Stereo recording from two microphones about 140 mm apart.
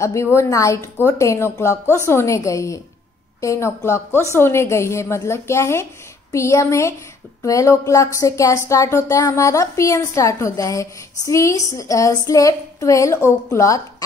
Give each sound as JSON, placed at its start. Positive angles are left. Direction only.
{"t": 0.0, "sound": "speech", "side_deg": 20}